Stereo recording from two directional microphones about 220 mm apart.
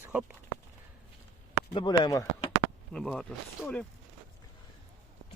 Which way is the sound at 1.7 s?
20° left (ahead or behind).